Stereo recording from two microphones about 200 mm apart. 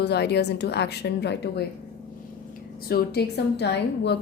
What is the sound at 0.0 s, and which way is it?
A woman's voice, 55° left (ahead or behind).